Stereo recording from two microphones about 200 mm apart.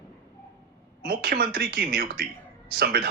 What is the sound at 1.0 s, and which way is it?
A man's voice, 50° right (ahead or behind).